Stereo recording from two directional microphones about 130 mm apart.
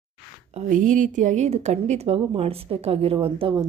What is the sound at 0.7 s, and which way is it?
A woman's voice, 85° right.